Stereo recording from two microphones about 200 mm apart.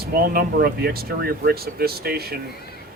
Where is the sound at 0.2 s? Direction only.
50° right (ahead or behind).